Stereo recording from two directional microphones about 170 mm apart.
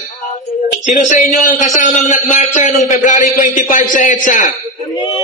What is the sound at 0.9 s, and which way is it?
A man's voice, 45° left (ahead or behind).